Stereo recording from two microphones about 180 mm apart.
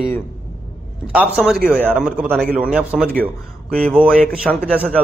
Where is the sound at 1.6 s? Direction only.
5° right (ahead or behind).